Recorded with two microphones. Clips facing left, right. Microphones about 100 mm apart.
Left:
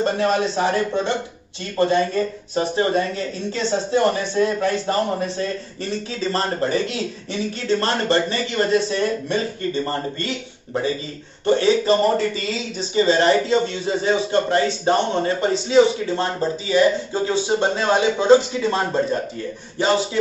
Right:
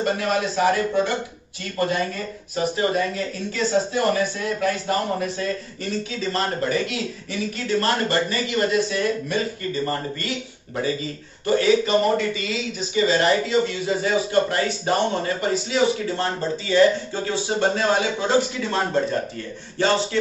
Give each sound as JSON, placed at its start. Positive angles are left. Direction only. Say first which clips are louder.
{"t": 0.0, "sound": "speech", "louder": "left 3 dB", "side_deg": 30}
{"t": 19.8, "sound": "speech", "louder": "left 1 dB", "side_deg": 15}